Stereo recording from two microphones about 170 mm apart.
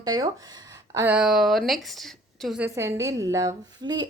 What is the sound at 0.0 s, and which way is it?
Speech, 20° right (ahead or behind).